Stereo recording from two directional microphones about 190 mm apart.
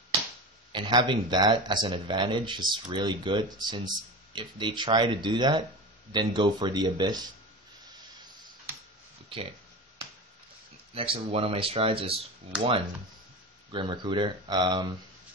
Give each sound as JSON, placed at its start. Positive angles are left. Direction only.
{"t": 0.7, "sound": "speech", "side_deg": -25}
{"t": 11.0, "sound": "speech", "side_deg": -30}